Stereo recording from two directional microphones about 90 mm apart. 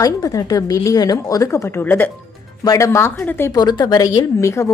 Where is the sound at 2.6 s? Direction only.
45° left (ahead or behind).